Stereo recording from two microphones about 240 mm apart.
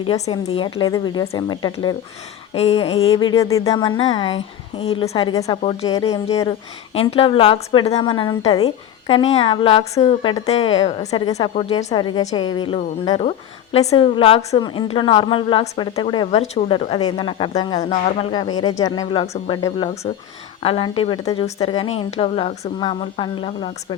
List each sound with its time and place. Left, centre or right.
0.0 s a woman's voice: left